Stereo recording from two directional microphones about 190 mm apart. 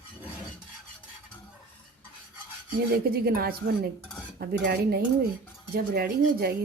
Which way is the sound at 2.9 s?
50° right (ahead or behind).